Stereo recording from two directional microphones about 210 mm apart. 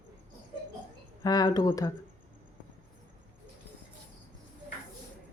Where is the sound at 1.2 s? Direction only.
20° left (ahead or behind).